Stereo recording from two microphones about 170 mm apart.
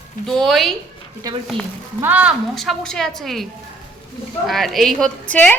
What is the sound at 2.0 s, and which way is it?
A woman's voice, 10° right (ahead or behind).